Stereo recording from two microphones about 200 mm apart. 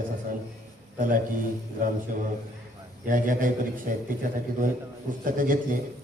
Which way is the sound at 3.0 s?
40° right (ahead or behind).